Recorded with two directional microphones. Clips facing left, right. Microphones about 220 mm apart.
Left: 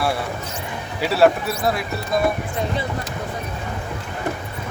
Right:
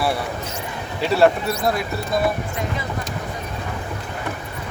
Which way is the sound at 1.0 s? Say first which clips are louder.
Even; centre (ahead or behind).